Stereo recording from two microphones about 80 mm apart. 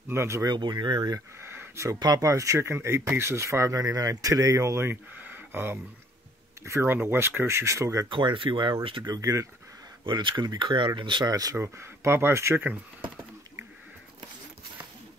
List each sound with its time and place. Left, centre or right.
0.1 s speech: right
0.5 s speech: right
1.4 s a sound: right
2.0 s speech: right
2.2 s speech: right
5.1 s a sound: right
6.6 s speech: right
8.1 s speech: right
9.1 s speech: right
10.0 s speech: right
11.5 s speech: right